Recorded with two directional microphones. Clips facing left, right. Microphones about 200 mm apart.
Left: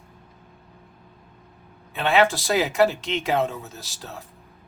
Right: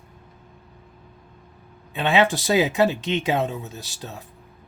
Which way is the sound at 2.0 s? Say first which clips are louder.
Even; 15° right (ahead or behind).